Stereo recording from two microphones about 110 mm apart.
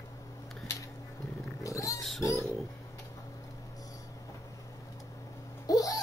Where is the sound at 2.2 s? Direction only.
30° left (ahead or behind).